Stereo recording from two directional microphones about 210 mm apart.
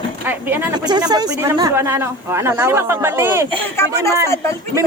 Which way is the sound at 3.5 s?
10° left (ahead or behind).